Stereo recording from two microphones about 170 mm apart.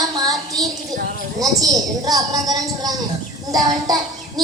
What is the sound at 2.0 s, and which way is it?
Speech, 20° right (ahead or behind).